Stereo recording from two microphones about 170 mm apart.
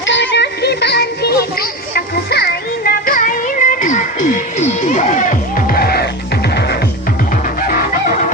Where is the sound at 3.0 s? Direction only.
50° left (ahead or behind).